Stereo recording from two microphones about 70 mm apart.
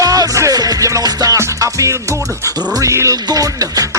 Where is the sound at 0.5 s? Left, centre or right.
Right.